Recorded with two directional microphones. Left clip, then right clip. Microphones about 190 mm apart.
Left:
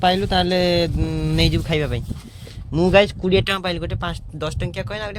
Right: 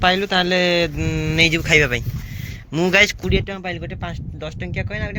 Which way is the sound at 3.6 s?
30° left (ahead or behind).